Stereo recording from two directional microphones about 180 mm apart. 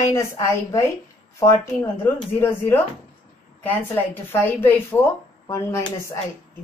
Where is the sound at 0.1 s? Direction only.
15° left (ahead or behind).